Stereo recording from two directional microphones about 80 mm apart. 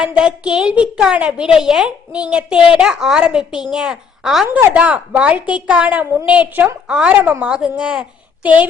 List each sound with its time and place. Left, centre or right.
0.0 s a woman's voice: centre
4.4 s a woman's voice: right
4.7 s a woman's voice: centre
7.1 s a woman's voice: right